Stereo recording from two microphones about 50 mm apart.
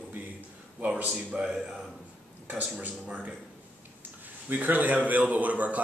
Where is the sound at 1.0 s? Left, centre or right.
Right.